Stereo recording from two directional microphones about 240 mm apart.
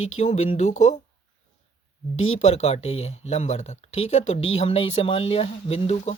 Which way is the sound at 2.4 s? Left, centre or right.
Left.